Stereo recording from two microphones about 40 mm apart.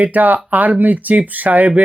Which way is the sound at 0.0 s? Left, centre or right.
Right.